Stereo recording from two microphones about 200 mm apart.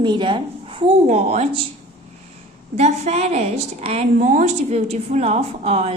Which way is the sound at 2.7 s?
35° right (ahead or behind).